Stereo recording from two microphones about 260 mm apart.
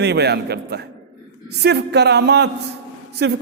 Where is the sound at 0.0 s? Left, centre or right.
Right.